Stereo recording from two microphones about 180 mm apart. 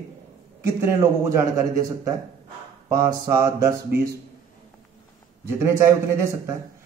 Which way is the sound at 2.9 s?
15° right (ahead or behind).